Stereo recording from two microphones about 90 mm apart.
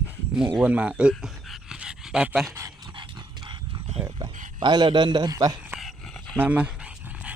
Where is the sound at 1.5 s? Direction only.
10° right (ahead or behind).